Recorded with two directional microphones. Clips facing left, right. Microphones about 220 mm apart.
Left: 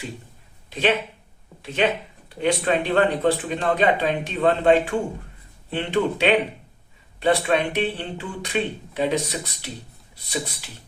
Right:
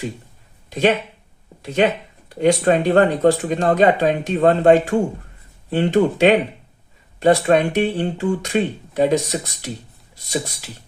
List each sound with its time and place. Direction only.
0.7 s speech: 45° right (ahead or behind)